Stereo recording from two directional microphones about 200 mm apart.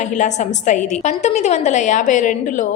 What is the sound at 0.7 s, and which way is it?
A woman's voice, 35° left (ahead or behind).